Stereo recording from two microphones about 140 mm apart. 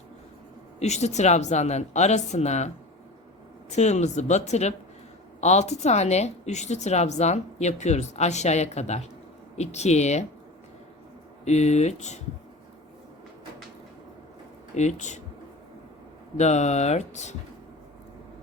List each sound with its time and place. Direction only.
0.8 s a woman's voice: 55° left (ahead or behind)
11.4 s a woman's voice: 55° left (ahead or behind)
14.8 s speech: 55° left (ahead or behind)
16.4 s a woman's voice: 55° left (ahead or behind)